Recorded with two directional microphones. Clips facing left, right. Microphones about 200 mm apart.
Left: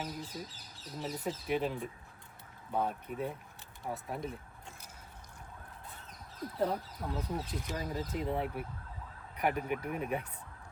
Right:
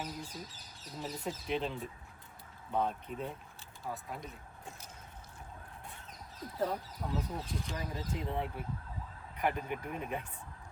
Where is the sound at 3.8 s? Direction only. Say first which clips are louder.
Left 4 dB; 25° left (ahead or behind).